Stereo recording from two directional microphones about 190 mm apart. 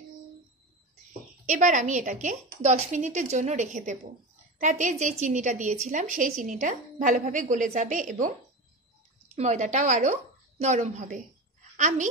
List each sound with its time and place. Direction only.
1.4 s a woman's voice: 40° right (ahead or behind)
9.3 s a woman's voice: 35° right (ahead or behind)